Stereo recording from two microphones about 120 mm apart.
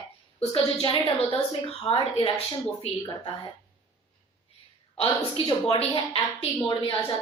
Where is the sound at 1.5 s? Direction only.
50° left (ahead or behind).